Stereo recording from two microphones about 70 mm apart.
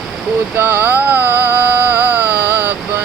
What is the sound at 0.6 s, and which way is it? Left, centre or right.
Music, right.